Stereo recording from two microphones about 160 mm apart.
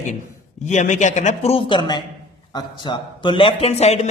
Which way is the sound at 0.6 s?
45° left (ahead or behind).